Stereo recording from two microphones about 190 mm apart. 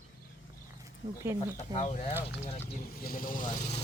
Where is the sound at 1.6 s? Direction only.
40° left (ahead or behind).